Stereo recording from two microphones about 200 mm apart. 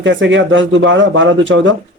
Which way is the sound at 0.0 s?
65° right (ahead or behind).